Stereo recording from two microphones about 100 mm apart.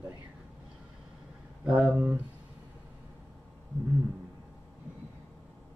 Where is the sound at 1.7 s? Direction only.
15° right (ahead or behind).